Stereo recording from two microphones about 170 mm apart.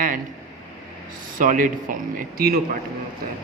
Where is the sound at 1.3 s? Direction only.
50° right (ahead or behind).